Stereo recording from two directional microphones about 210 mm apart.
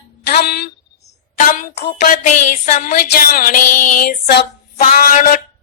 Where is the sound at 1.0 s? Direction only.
40° left (ahead or behind).